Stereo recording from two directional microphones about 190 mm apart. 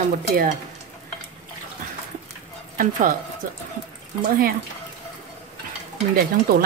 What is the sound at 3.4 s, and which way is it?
Speech, 45° right (ahead or behind).